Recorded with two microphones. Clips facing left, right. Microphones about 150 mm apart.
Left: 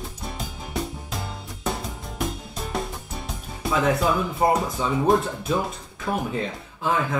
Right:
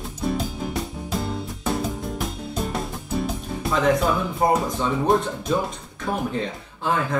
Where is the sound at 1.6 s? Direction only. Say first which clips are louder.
Right 3 dB; centre (ahead or behind).